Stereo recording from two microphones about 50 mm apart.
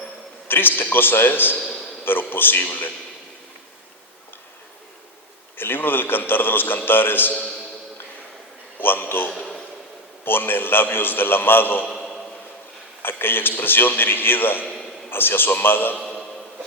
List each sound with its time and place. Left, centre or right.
0.4 s a man's voice: left
1.5 s a man's voice: centre
2.3 s a man's voice: left
5.5 s a man's voice: left
8.8 s a man's voice: left
11.9 s a sound: centre
13.0 s a man's voice: left